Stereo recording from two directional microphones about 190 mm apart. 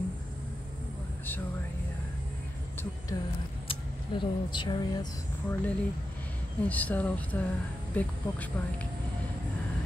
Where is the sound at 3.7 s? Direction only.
25° left (ahead or behind).